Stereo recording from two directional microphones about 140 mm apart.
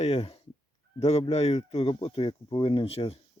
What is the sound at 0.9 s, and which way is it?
Fowl, 50° left (ahead or behind).